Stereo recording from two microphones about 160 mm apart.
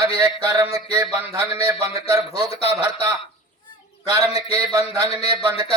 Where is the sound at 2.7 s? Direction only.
20° right (ahead or behind).